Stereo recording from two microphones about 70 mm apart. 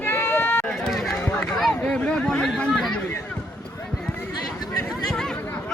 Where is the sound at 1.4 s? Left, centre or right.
Centre.